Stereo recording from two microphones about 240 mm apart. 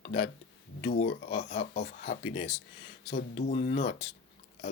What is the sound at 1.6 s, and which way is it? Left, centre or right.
Speech, left.